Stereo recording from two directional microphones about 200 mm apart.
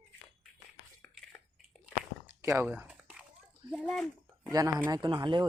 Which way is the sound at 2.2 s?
15° right (ahead or behind).